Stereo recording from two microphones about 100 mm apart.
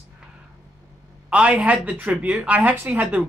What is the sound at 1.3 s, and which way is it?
A man's voice, 10° right (ahead or behind).